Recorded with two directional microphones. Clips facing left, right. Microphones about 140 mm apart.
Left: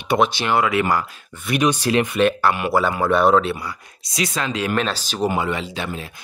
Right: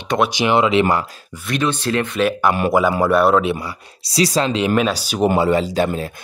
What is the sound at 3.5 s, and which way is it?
Speech, 25° right (ahead or behind).